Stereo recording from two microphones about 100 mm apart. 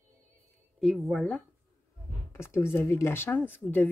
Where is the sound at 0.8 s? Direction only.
Centre (ahead or behind).